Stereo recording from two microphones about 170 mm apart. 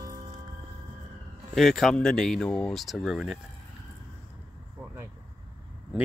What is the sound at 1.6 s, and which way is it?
Speech, centre (ahead or behind).